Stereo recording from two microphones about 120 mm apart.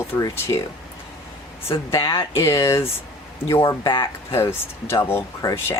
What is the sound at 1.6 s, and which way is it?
Speech, 25° left (ahead or behind).